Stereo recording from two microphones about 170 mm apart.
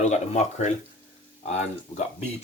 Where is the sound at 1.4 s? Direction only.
40° left (ahead or behind).